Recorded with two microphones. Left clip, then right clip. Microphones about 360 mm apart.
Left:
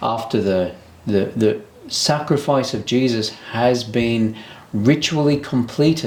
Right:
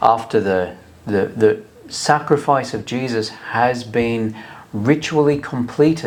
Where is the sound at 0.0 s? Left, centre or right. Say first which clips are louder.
Right 5 dB; right.